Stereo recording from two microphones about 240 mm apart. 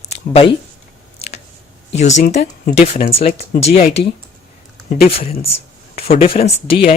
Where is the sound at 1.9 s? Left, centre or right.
Left.